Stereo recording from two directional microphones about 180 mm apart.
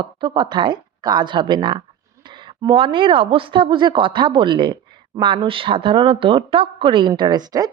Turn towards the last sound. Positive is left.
turn(degrees=-20)  # may be behind; listen again after turning